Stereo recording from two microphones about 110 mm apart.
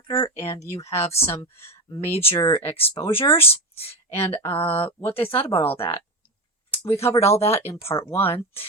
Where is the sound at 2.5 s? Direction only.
55° left (ahead or behind).